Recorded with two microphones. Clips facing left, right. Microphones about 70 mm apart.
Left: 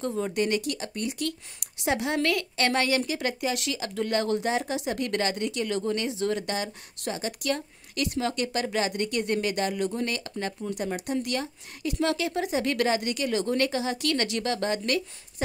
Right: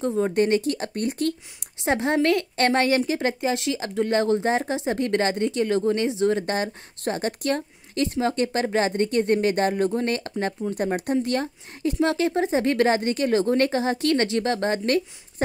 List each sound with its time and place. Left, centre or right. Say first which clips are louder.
0.0 s speech: right 6 dB; right
0.3 s speech: right 6 dB; right
6.5 s speech: right 5 dB; right